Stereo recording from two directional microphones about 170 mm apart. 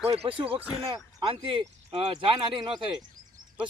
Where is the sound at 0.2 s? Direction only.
30° right (ahead or behind).